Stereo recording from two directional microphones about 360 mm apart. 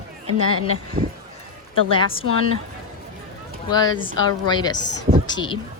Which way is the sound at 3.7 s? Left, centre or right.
Centre.